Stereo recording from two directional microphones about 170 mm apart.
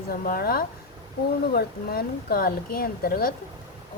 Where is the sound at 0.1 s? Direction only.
60° left (ahead or behind).